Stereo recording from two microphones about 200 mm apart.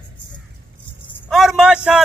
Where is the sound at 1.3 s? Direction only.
Centre (ahead or behind).